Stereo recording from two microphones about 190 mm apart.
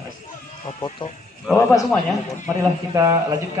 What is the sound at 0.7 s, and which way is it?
Speech, 25° left (ahead or behind).